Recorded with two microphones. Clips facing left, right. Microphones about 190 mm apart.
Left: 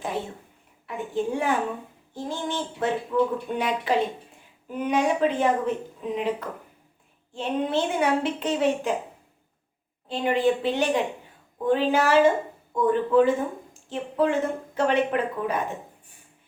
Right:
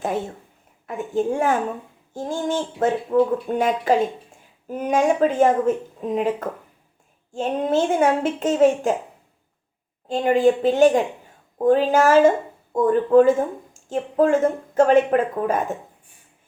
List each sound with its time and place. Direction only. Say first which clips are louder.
0.9 s speech: right 5 dB; 45° right (ahead or behind)
10.1 s speech: right 5 dB; 45° right (ahead or behind)